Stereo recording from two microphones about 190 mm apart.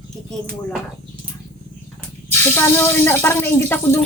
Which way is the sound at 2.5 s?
10° left (ahead or behind).